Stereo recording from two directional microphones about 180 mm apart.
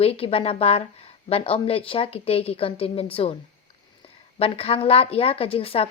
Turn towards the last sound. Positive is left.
turn(degrees=30)  # may be behind; listen again after turning